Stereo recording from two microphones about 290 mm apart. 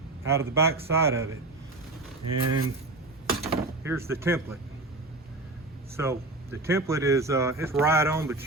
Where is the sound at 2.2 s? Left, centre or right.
Right.